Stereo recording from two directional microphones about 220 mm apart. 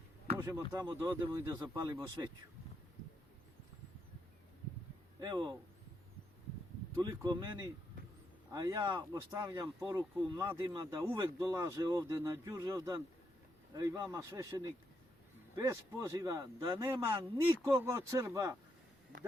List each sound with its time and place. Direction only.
0.4 s speech: 15° right (ahead or behind)
5.2 s speech: 20° right (ahead or behind)
7.0 s speech: 20° right (ahead or behind)